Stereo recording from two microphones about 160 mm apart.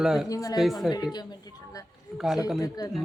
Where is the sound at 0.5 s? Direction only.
Centre (ahead or behind).